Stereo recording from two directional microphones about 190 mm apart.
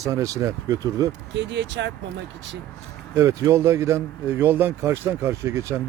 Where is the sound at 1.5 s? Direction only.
70° right (ahead or behind).